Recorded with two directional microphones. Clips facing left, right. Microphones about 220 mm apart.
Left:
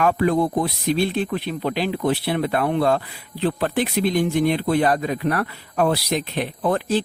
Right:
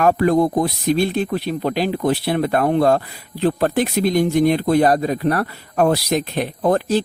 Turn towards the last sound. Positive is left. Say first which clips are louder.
# right 4 dB
turn(degrees=-40)  # may be behind; listen again after turning